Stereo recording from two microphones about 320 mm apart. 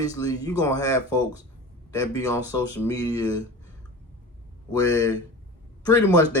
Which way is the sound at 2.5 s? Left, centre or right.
Centre.